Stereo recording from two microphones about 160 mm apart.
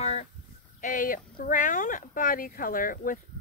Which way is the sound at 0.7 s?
55° left (ahead or behind).